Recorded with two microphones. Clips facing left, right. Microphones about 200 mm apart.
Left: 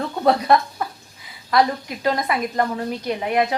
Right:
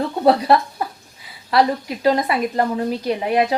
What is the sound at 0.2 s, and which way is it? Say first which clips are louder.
Speech: right 2 dB; 35° right (ahead or behind).